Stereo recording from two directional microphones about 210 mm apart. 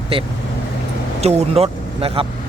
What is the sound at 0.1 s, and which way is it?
A man's voice, 25° right (ahead or behind).